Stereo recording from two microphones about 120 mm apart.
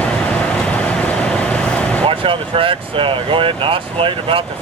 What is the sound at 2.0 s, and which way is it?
Speech, 45° right (ahead or behind).